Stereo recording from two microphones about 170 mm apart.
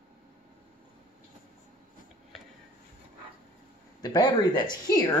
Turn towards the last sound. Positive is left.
turn(degrees=20)  # may be behind; listen again after turning